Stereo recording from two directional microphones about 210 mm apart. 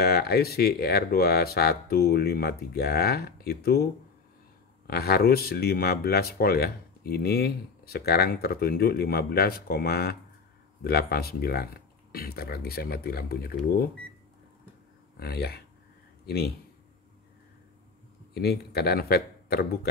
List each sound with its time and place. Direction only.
0.0 s speech: 50° left (ahead or behind)
15.1 s speech: 50° left (ahead or behind)
18.3 s speech: 50° left (ahead or behind)